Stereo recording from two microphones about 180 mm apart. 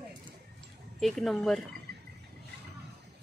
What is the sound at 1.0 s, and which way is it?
Speech, centre (ahead or behind).